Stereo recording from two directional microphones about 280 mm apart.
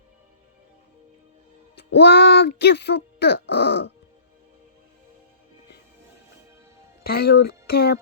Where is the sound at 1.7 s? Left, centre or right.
Left.